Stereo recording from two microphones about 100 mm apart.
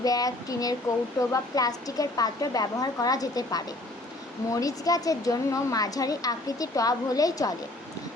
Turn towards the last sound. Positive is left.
turn(degrees=35)  # may be behind; listen again after turning